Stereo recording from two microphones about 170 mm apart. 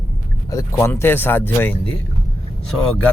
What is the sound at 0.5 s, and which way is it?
Speech, 15° left (ahead or behind).